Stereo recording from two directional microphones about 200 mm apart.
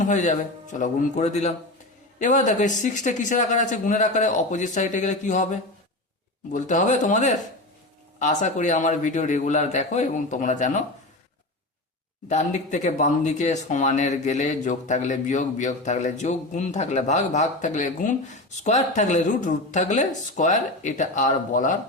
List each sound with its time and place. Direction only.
0.0 s speech: 40° left (ahead or behind)
12.3 s speech: 35° left (ahead or behind)